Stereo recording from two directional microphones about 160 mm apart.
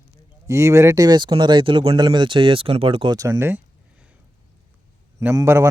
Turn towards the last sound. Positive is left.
turn(degrees=-15)  # may be behind; listen again after turning